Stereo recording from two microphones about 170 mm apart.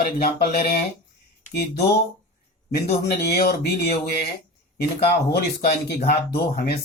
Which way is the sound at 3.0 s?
70° left (ahead or behind).